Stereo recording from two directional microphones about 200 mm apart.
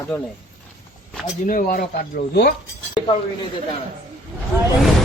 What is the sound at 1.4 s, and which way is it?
Speech, 45° left (ahead or behind).